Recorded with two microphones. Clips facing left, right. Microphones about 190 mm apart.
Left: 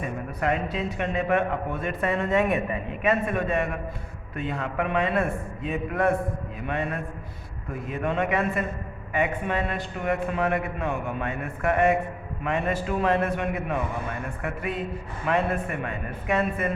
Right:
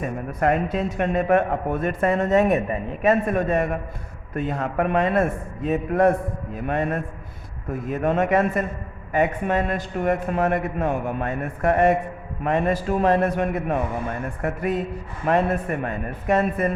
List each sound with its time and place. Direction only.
0.0 s a man's voice: 45° right (ahead or behind)